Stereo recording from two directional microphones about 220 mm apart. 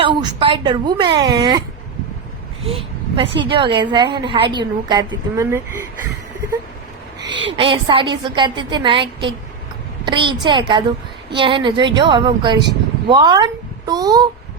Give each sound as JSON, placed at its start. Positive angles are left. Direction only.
{"t": 0.0, "sound": "a woman's voice", "side_deg": -20}
{"t": 2.6, "sound": "a sound", "side_deg": -25}
{"t": 3.5, "sound": "a woman's voice", "side_deg": -20}
{"t": 7.3, "sound": "a woman's voice", "side_deg": -55}
{"t": 7.5, "sound": "a woman's voice", "side_deg": -20}